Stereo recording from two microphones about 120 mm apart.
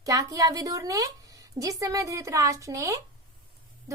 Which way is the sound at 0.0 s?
30° right (ahead or behind).